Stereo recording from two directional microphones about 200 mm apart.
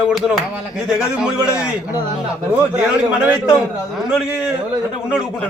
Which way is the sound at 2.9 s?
5° right (ahead or behind).